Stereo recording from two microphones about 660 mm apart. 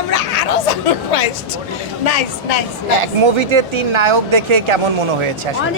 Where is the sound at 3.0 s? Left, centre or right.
Right.